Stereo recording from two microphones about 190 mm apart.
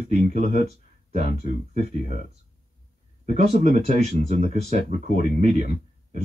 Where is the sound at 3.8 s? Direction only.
35° right (ahead or behind).